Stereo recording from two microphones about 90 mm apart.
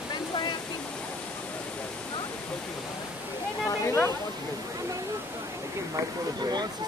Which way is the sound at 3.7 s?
35° left (ahead or behind).